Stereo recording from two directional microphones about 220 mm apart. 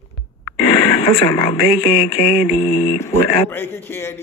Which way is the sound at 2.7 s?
30° left (ahead or behind).